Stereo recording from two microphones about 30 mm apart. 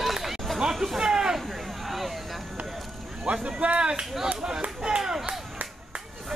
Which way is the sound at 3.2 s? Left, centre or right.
Right.